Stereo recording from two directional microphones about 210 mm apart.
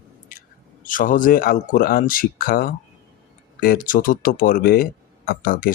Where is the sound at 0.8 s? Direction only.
40° left (ahead or behind).